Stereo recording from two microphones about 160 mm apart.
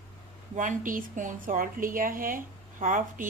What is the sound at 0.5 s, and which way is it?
Speech, 50° right (ahead or behind).